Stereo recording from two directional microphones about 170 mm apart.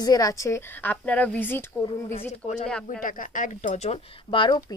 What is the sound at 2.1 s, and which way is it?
A woman's voice, 45° left (ahead or behind).